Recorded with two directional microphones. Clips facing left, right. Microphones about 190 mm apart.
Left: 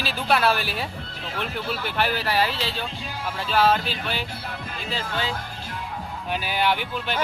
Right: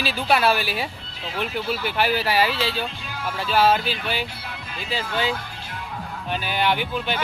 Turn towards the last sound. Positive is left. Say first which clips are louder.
# right 2 dB
turn(degrees=0)  # may be behind; listen again after turning